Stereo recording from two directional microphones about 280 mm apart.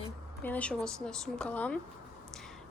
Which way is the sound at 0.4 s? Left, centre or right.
Centre.